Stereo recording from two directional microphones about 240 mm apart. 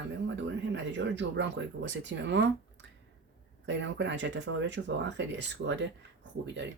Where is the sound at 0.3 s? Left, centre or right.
Right.